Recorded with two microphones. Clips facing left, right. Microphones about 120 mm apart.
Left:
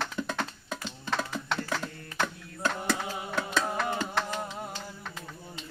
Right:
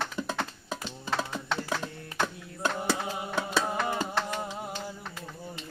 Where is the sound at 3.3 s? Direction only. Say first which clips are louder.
Even; 10° right (ahead or behind).